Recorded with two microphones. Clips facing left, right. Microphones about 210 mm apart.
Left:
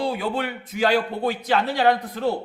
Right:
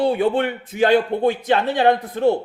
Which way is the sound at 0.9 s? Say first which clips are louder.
Right 6 dB; 25° right (ahead or behind).